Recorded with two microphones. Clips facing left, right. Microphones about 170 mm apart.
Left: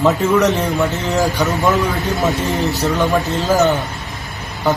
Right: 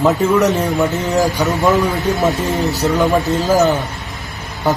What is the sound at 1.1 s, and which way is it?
Speech, 10° right (ahead or behind).